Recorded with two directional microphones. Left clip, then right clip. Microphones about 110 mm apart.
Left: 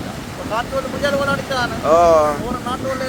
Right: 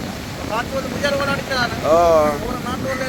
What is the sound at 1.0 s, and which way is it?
Speech, 25° left (ahead or behind).